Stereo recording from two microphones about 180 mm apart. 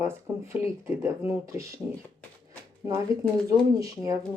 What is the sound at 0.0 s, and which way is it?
Speech, 15° right (ahead or behind).